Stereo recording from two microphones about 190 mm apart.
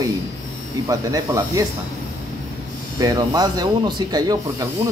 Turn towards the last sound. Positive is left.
turn(degrees=-20)  # may be behind; listen again after turning